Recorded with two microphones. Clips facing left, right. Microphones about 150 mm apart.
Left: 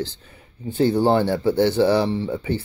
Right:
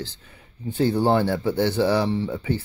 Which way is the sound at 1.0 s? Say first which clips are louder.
Left 2 dB; 20° left (ahead or behind).